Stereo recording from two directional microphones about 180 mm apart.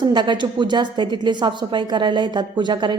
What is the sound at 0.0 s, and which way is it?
A woman's voice, 25° right (ahead or behind).